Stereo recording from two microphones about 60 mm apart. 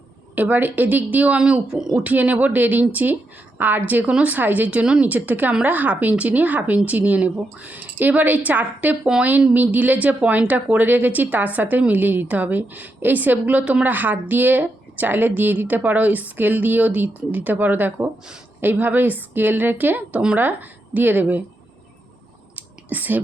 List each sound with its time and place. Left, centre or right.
0.3 s speech: right; by 2.0 s centre
2.0 s a woman's voice: right
20.1 s speech: right
22.5 s whispering: right